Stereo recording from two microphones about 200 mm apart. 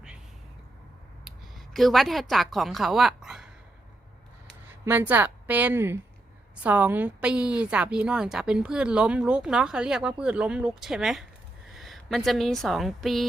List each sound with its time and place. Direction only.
1.2 s a woman's voice: centre (ahead or behind)
4.7 s a woman's voice: 10° right (ahead or behind)